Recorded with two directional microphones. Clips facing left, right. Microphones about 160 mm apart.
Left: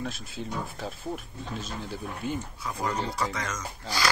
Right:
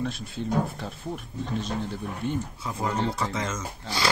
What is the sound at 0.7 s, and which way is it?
Speech, centre (ahead or behind).